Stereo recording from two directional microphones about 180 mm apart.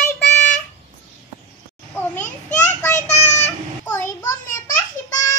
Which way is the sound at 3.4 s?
15° left (ahead or behind).